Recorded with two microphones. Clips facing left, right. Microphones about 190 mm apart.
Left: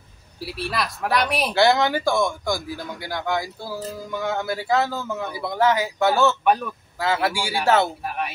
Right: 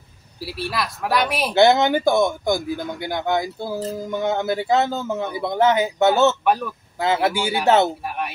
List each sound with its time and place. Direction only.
0.4 s a woman's voice: centre (ahead or behind)
1.5 s speech: 20° right (ahead or behind)
6.4 s a woman's voice: centre (ahead or behind)
7.0 s speech: 20° right (ahead or behind)
8.0 s a woman's voice: centre (ahead or behind)